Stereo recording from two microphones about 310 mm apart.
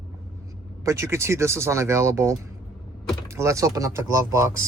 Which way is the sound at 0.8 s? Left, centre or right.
Centre.